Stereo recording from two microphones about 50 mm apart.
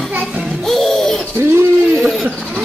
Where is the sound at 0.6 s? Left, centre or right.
Centre.